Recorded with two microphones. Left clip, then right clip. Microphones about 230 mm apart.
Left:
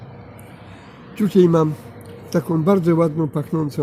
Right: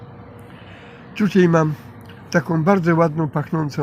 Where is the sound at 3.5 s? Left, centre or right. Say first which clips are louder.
Left 2 dB; right.